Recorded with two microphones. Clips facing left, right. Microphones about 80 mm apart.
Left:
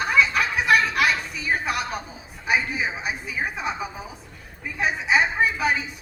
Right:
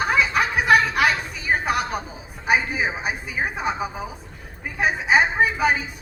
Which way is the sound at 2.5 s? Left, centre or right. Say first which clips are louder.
Right 3 dB; right.